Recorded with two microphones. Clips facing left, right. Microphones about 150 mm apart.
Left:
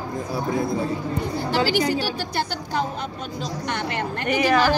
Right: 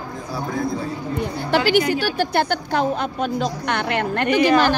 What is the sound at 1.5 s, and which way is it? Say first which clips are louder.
A woman's voice: right 4 dB; 60° right (ahead or behind).